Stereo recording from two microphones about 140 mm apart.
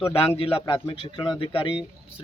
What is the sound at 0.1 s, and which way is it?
A man's voice, 45° left (ahead or behind).